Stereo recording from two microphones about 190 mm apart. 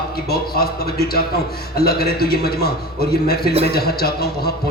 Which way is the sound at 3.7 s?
55° left (ahead or behind).